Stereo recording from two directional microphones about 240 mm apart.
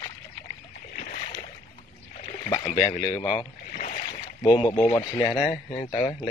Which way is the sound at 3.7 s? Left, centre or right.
Left.